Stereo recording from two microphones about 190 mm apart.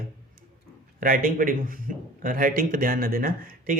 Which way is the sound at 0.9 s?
45° right (ahead or behind).